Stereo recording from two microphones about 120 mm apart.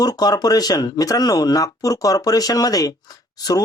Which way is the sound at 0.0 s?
35° left (ahead or behind).